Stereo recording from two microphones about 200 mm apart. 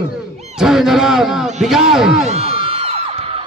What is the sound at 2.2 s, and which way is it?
Music, 30° right (ahead or behind).